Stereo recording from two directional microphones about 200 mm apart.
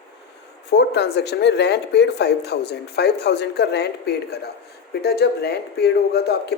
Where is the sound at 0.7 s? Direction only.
55° left (ahead or behind).